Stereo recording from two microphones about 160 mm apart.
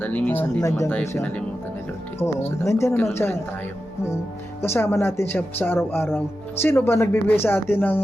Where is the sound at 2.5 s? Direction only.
15° left (ahead or behind).